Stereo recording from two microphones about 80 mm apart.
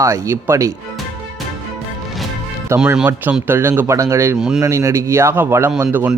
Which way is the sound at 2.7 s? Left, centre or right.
Right.